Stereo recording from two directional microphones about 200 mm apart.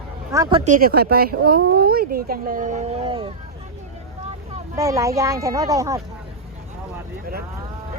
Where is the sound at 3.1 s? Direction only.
25° right (ahead or behind).